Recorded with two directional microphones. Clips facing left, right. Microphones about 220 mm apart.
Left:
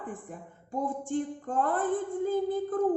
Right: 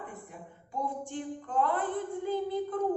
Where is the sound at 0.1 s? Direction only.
50° left (ahead or behind).